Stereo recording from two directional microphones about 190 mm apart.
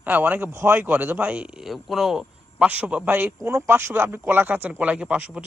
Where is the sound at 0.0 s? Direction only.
10° right (ahead or behind).